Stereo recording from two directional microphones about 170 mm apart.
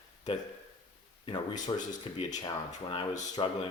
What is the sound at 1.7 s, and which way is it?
Speech, 25° left (ahead or behind).